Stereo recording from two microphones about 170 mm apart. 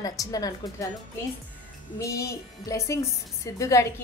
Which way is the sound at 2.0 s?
20° left (ahead or behind).